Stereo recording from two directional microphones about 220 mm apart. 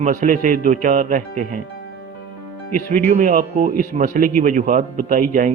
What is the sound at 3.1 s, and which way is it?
A man's voice, 40° right (ahead or behind).